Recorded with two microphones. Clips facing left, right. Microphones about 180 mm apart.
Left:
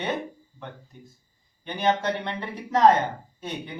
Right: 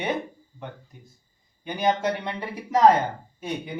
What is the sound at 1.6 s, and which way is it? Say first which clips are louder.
A man's voice: right 1 dB; 10° right (ahead or behind).